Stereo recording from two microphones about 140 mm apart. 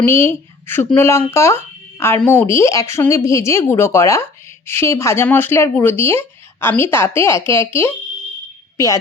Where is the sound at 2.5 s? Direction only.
20° left (ahead or behind).